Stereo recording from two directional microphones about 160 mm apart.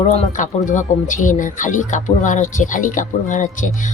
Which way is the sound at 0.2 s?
50° left (ahead or behind).